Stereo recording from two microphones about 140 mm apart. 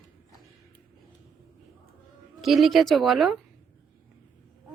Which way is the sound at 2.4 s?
Centre (ahead or behind).